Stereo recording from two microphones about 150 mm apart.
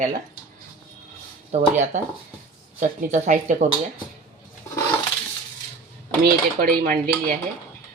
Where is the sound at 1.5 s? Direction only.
50° right (ahead or behind).